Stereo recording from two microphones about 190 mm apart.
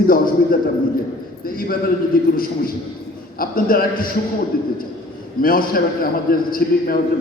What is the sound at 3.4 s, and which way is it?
Speech, 50° left (ahead or behind).